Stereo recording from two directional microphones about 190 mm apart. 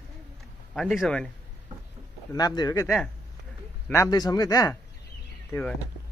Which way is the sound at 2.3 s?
20° left (ahead or behind).